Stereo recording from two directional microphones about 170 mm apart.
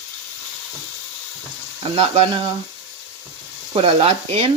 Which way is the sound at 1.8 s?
30° right (ahead or behind).